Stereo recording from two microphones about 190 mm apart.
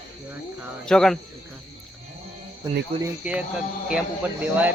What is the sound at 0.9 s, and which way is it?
Speech, 5° left (ahead or behind).